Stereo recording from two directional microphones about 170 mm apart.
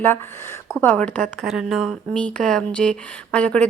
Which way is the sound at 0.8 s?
10° left (ahead or behind).